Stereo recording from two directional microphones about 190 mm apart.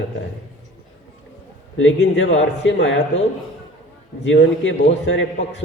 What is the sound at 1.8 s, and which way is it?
A man's voice, 75° left (ahead or behind).